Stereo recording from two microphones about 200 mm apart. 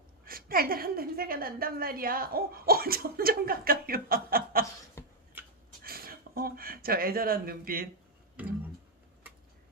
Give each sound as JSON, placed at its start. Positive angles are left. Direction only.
{"t": 0.3, "sound": "a woman's voice", "side_deg": -45}
{"t": 5.0, "sound": "cough", "side_deg": 15}
{"t": 5.8, "sound": "speech", "side_deg": -50}